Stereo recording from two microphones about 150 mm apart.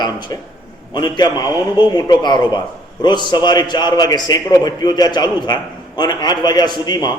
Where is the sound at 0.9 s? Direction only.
30° left (ahead or behind).